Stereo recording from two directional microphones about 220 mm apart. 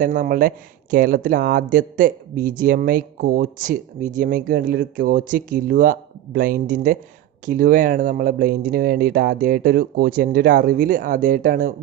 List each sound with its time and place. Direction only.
0.0 s a man's voice: 35° right (ahead or behind)